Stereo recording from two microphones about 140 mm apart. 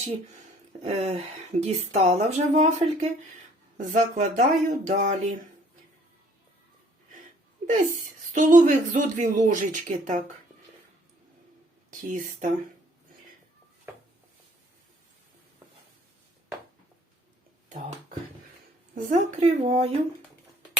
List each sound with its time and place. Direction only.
0.4 s speech: 55° right (ahead or behind)
8.3 s speech: 65° right (ahead or behind)
11.9 s speech: 65° right (ahead or behind)
18.9 s speech: 65° right (ahead or behind); by 19.9 s 50° right (ahead or behind)